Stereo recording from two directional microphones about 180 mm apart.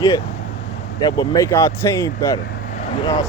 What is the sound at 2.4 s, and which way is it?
Vehicle, 60° left (ahead or behind).